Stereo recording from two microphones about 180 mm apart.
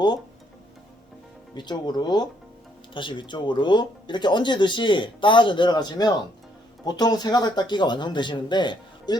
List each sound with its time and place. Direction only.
1.5 s speech: 25° left (ahead or behind)